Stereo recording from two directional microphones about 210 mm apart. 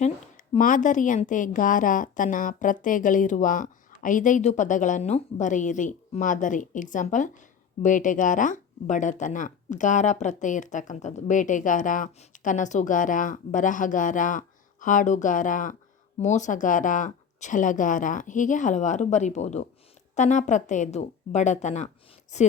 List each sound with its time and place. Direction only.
0.0 s a woman's voice: 35° left (ahead or behind)